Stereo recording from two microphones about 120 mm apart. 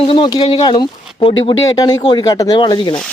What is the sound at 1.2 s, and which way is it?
Speech, 50° left (ahead or behind).